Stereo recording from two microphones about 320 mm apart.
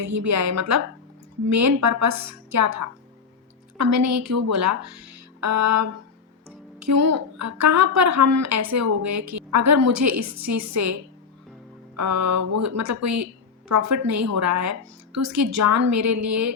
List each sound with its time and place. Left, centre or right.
0.0 s a woman's voice: right
11.9 s a woman's voice: right